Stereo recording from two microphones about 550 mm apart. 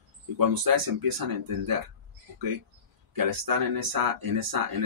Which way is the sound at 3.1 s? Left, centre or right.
Right.